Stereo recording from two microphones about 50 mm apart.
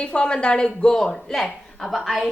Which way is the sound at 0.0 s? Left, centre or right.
Centre.